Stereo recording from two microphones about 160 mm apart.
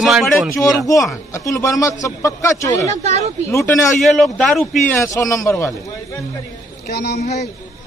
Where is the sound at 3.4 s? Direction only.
20° left (ahead or behind).